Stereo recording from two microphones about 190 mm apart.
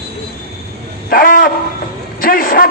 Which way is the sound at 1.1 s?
50° left (ahead or behind).